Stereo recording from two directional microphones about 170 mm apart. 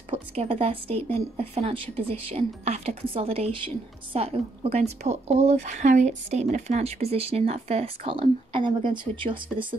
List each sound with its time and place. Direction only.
0.1 s speech: 35° right (ahead or behind)